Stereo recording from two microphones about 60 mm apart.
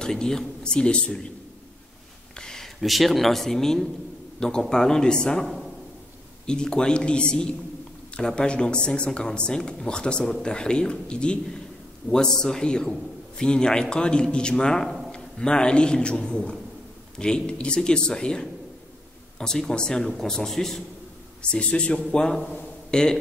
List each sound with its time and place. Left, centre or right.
0.0 s a man's voice: centre
2.3 s a man's voice: centre
21.4 s a man's voice: centre